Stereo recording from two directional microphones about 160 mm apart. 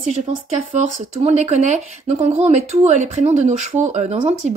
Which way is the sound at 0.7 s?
45° right (ahead or behind).